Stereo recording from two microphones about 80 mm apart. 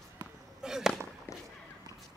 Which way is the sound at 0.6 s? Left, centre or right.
Centre.